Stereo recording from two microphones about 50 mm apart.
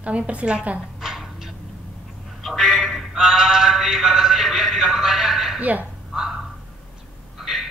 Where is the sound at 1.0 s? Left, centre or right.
Centre.